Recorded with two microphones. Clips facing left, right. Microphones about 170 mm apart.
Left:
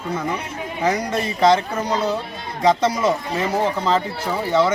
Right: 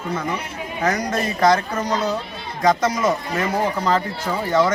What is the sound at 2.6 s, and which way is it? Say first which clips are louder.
Speech: left 1 dB; 30° left (ahead or behind).